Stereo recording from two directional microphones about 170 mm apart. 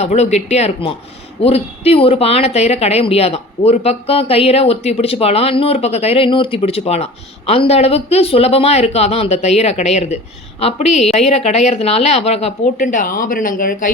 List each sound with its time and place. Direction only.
0.0 s speech: 40° left (ahead or behind)
12.7 s speech: 50° left (ahead or behind)